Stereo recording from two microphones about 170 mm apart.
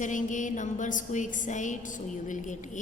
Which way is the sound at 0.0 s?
50° left (ahead or behind).